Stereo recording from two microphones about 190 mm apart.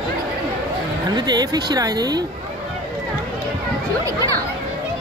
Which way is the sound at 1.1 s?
20° right (ahead or behind).